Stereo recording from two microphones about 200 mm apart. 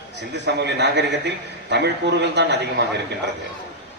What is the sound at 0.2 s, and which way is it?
A man's voice, 60° right (ahead or behind).